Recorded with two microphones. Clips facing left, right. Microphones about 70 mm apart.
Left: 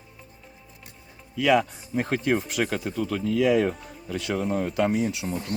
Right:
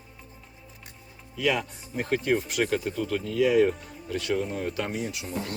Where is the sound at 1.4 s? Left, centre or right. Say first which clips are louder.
Left 6 dB; left.